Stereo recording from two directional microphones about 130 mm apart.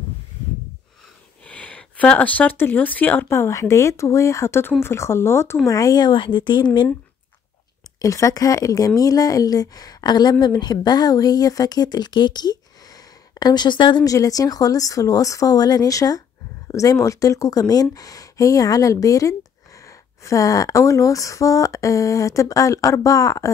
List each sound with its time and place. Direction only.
1.4 s speech: 10° left (ahead or behind); by 6.9 s 35° left (ahead or behind)
8.0 s speech: 25° left (ahead or behind)